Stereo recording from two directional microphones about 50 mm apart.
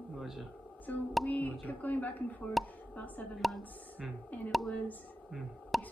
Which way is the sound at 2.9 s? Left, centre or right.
Left.